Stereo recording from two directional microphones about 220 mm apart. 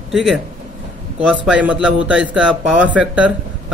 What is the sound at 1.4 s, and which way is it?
Speech, 5° right (ahead or behind).